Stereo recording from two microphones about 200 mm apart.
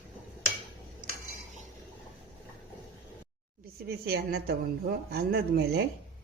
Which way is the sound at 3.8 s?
50° right (ahead or behind).